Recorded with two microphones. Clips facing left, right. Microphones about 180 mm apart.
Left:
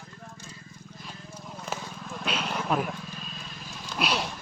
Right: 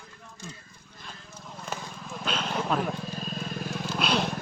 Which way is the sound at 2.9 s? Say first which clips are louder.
Right 5 dB; 40° right (ahead or behind).